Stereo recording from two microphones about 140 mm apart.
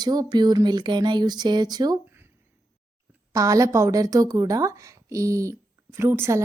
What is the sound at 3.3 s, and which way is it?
Speech, 25° right (ahead or behind).